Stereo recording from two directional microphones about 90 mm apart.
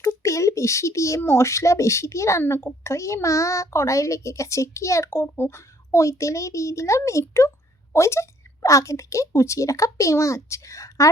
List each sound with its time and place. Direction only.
0.0 s a woman's voice: 35° left (ahead or behind)